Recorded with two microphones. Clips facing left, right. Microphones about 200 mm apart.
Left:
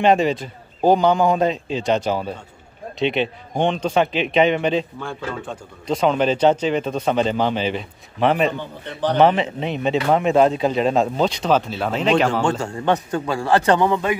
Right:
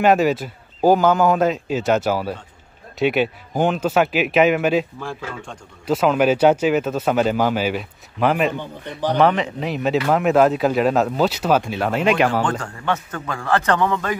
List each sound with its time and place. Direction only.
0.0 s speech: 5° right (ahead or behind)
8.5 s speech: 10° right (ahead or behind)
9.2 s speech: 30° left (ahead or behind)
9.6 s speech: 5° right (ahead or behind)
12.5 s a man's voice: 25° left (ahead or behind)